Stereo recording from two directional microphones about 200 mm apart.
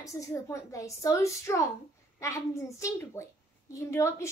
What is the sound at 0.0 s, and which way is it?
A woman's voice, 15° left (ahead or behind).